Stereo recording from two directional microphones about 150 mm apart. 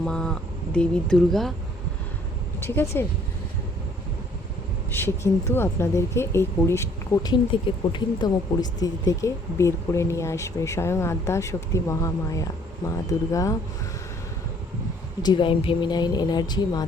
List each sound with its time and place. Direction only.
0.0 s speech: 5° left (ahead or behind)
2.6 s speech: 15° left (ahead or behind)
4.9 s a woman's voice: 15° left (ahead or behind)
15.2 s a woman's voice: 30° left (ahead or behind)